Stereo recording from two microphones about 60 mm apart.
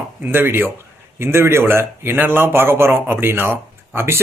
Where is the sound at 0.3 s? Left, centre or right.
Right.